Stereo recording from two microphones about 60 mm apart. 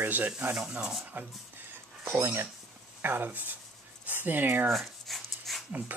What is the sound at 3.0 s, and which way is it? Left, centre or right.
Speech, right.